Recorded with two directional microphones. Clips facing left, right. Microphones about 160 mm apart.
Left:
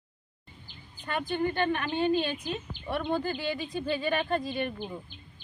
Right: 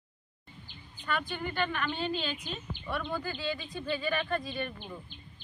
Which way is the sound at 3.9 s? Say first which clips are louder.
Left 3 dB; 30° left (ahead or behind).